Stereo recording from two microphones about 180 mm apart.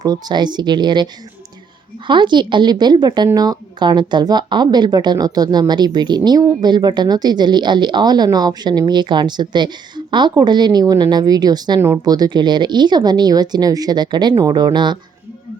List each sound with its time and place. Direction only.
0.0 s speech: 20° right (ahead or behind)
2.0 s speech: 25° right (ahead or behind)